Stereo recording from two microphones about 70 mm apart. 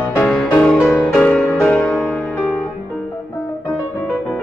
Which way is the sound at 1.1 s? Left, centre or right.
Centre.